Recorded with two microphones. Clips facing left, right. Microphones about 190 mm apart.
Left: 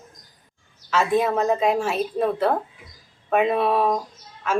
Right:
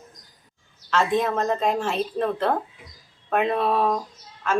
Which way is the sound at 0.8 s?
10° left (ahead or behind).